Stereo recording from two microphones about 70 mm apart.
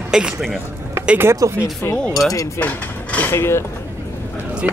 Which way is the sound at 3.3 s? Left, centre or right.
Left.